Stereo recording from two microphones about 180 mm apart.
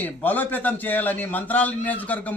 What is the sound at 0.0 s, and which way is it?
A man's voice, 10° left (ahead or behind).